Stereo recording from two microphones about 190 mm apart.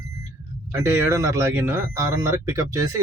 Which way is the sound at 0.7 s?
15° right (ahead or behind).